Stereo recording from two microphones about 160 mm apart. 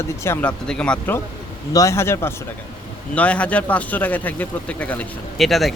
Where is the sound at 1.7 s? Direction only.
20° left (ahead or behind).